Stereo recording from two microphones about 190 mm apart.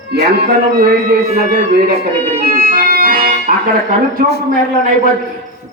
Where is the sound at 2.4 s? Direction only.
50° right (ahead or behind).